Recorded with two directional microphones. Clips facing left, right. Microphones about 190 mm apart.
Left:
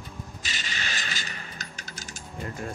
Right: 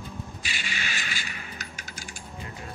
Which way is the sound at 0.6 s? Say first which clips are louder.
Even; 40° left (ahead or behind).